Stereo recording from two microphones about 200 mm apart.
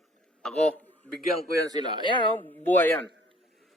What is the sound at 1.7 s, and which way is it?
Speech, 20° right (ahead or behind).